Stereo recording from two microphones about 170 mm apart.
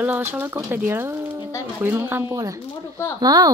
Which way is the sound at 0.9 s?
15° right (ahead or behind).